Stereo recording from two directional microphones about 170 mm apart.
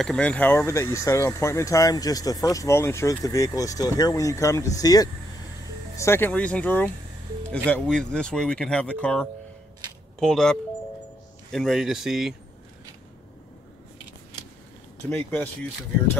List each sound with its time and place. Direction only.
0.0 s speech: 5° left (ahead or behind)
15.0 s speech: 10° left (ahead or behind)